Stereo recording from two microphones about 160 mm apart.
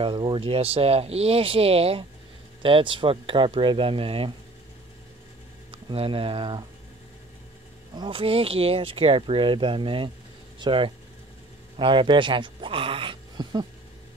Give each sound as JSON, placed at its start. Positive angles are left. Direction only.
{"t": 0.0, "sound": "speech", "side_deg": -30}
{"t": 5.7, "sound": "speech", "side_deg": -35}
{"t": 7.9, "sound": "speech", "side_deg": -30}